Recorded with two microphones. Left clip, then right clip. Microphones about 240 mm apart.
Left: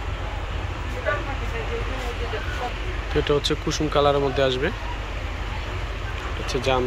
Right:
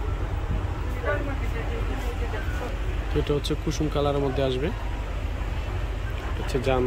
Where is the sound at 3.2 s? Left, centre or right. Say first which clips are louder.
Left 5 dB; centre.